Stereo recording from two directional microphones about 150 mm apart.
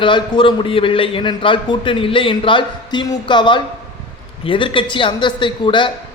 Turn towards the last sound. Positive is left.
turn(degrees=30)  # may be behind; listen again after turning